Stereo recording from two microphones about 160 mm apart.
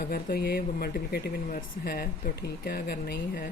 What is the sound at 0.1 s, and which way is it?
Speech, 75° left (ahead or behind).